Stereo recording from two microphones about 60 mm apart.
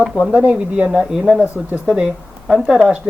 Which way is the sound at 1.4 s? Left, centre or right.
Right.